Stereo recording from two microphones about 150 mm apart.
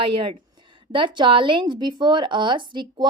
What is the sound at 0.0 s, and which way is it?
Speech, 35° right (ahead or behind).